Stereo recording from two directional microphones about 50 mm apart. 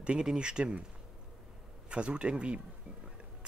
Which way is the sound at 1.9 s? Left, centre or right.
Right.